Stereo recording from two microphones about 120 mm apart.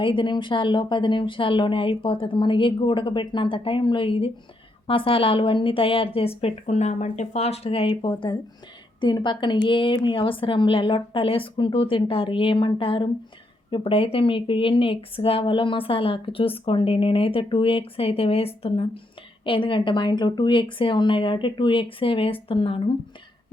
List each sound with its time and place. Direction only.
0.0 s a woman's voice: 45° left (ahead or behind)